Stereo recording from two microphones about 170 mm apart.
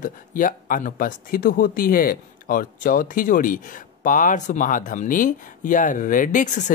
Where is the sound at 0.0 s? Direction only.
50° left (ahead or behind).